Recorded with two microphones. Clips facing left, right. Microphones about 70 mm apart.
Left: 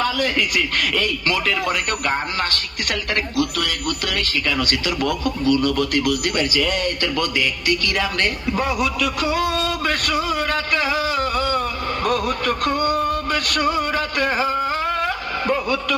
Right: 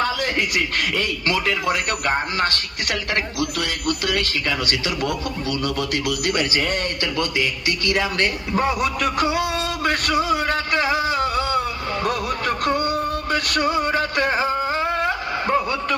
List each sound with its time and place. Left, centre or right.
0.0 s speech: right
3.8 s speech: left
6.4 s speech: right
7.0 s speech: left
7.7 s speech: right
8.5 s a man's voice: right
9.1 s speech: right
9.4 s a sound: left
10.4 s music: right
11.2 s a sound: left
12.7 s speech: left
13.3 s speech: right
13.8 s a sound: right